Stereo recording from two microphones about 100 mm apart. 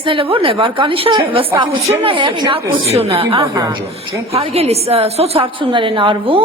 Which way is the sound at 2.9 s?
65° right (ahead or behind).